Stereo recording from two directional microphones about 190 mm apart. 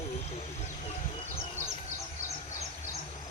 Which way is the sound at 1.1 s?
30° left (ahead or behind).